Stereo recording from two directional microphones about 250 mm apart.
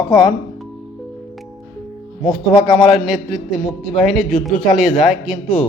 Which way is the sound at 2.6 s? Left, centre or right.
Centre.